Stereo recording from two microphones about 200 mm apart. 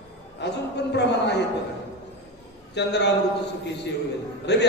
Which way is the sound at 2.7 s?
60° left (ahead or behind).